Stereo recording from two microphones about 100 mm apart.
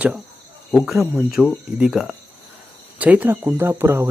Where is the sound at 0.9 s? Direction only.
5° right (ahead or behind).